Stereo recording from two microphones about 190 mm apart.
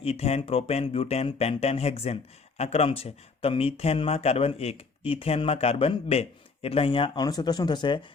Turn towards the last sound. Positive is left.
turn(degrees=25)  # may be behind; listen again after turning